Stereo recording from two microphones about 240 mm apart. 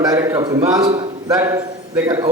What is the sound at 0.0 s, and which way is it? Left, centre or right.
A man's voice, centre.